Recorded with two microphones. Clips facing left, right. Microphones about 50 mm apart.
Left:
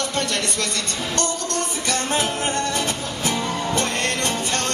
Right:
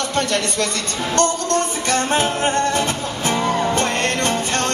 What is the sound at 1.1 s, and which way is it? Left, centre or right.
Music, right.